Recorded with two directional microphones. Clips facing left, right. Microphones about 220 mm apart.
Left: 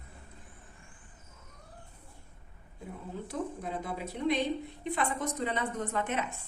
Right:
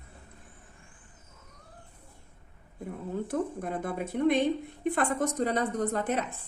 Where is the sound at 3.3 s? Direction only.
55° right (ahead or behind); by 6.4 s 35° right (ahead or behind).